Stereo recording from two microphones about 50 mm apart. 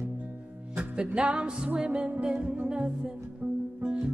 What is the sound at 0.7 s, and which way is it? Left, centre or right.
Music, centre.